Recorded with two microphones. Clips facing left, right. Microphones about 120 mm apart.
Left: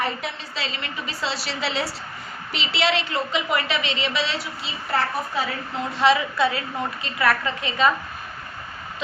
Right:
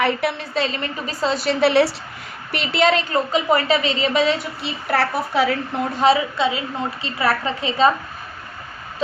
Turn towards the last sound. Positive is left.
turn(degrees=-30)  # may be behind; listen again after turning